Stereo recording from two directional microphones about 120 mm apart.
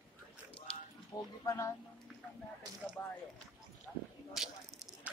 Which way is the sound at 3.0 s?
15° left (ahead or behind).